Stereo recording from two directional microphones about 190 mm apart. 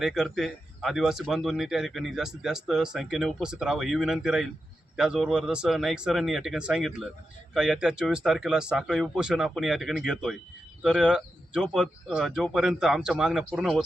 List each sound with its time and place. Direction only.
0.0 s speech: centre (ahead or behind)